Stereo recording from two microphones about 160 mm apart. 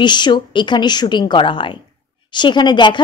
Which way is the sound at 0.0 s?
30° left (ahead or behind).